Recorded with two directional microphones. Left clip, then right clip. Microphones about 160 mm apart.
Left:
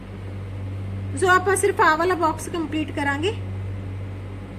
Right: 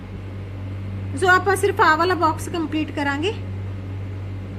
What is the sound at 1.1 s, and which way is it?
A woman's voice, 10° right (ahead or behind).